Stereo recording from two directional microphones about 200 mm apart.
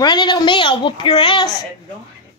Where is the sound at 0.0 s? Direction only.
20° left (ahead or behind).